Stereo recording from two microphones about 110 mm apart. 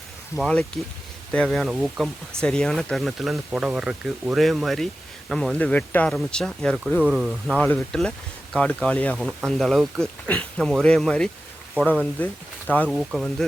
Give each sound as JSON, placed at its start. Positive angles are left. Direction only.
{"t": 0.4, "sound": "speech", "side_deg": 5}
{"t": 7.6, "sound": "speech", "side_deg": 5}
{"t": 12.9, "sound": "speech", "side_deg": -5}